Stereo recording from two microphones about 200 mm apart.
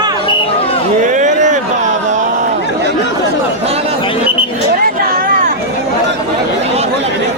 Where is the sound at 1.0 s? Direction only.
40° right (ahead or behind).